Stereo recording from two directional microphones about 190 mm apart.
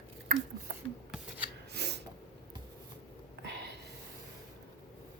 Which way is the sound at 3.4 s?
65° right (ahead or behind).